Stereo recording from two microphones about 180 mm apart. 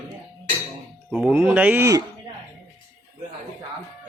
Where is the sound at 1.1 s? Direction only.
5° right (ahead or behind).